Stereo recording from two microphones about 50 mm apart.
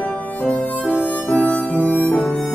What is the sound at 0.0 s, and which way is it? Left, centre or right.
Music, left.